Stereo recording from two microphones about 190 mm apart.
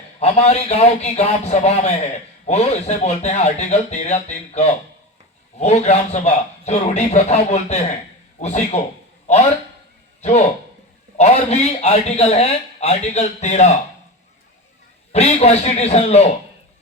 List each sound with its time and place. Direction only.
0.2 s a man's voice: 35° left (ahead or behind)
11.2 s a man's voice: 35° left (ahead or behind)
15.1 s a man's voice: 35° left (ahead or behind)